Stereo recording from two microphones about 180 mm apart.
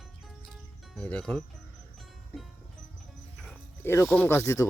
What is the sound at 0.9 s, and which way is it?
Speech, 5° left (ahead or behind).